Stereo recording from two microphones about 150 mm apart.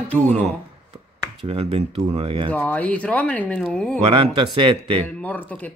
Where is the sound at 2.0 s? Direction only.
45° right (ahead or behind).